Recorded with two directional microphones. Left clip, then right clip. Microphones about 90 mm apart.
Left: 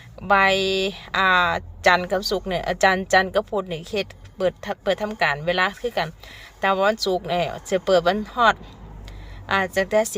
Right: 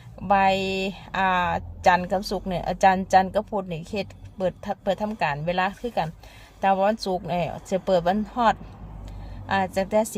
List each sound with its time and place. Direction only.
0.2 s speech: 25° right (ahead or behind)